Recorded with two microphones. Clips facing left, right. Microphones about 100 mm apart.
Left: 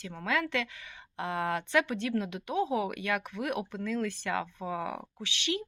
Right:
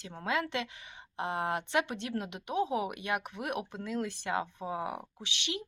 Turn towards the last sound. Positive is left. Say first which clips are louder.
# left 5 dB
turn(degrees=-20)  # may be behind; listen again after turning